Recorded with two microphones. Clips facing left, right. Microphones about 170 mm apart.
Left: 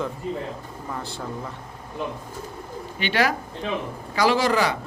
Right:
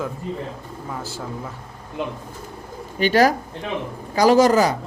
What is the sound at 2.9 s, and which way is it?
Speech, 40° right (ahead or behind).